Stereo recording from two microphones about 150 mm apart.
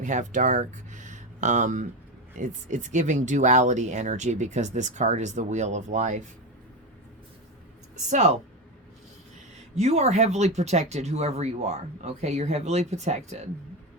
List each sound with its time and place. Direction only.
0.0 s speech: 55° right (ahead or behind)
8.1 s speech: 50° right (ahead or behind)
9.7 s speech: 50° right (ahead or behind)